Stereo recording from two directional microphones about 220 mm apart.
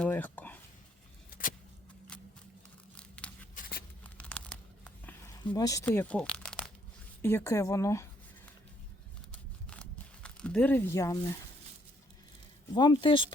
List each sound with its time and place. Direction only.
0.0 s a sound: 5° left (ahead or behind)
1.3 s vehicle: 40° left (ahead or behind)
3.0 s tearing: 5° left (ahead or behind)
3.5 s a sound: 45° left (ahead or behind)
4.2 s tearing: 5° left (ahead or behind)
5.4 s speech: 15° left (ahead or behind)
9.3 s a sound: 5° left (ahead or behind)
10.2 s speech: 5° left (ahead or behind)
12.7 s speech: 20° left (ahead or behind)